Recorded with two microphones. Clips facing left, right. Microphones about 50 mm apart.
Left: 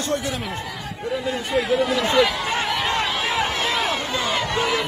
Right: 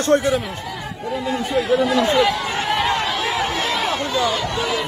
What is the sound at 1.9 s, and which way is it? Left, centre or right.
Speech, right.